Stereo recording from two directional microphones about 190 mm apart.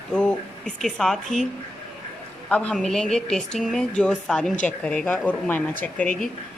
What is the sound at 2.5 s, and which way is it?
Speech, 5° left (ahead or behind).